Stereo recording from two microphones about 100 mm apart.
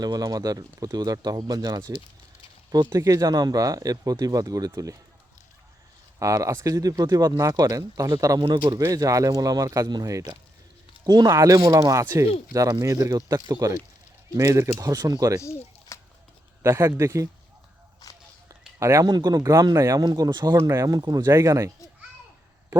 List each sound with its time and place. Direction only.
0.0 s speech: 40° right (ahead or behind)
6.1 s speech: 35° right (ahead or behind)
8.4 s speech: 55° right (ahead or behind)
8.9 s speech: 35° right (ahead or behind)
15.4 s a sound: 30° left (ahead or behind)
16.6 s speech: 30° right (ahead or behind)
18.0 s a sound: 35° left (ahead or behind)
18.8 s speech: 30° right (ahead or behind)
19.0 s speech: 40° right (ahead or behind)